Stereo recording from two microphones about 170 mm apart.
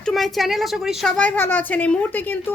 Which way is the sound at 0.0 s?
Centre (ahead or behind).